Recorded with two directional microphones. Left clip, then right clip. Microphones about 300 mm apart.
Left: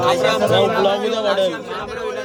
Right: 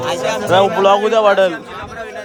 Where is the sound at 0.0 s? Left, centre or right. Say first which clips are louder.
Left 2 dB; centre.